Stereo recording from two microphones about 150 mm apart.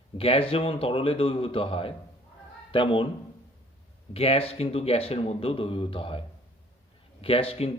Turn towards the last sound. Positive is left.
turn(degrees=40)  # may be behind; listen again after turning